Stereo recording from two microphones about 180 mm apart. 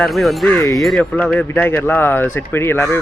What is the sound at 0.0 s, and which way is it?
Speech, centre (ahead or behind).